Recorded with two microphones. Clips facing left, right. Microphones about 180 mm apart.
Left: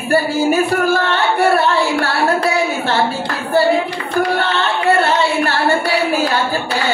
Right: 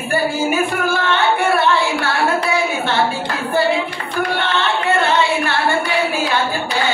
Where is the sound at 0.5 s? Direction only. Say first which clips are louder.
Left 4 dB; 40° left (ahead or behind).